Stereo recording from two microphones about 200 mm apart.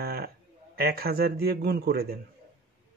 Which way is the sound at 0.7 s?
50° right (ahead or behind).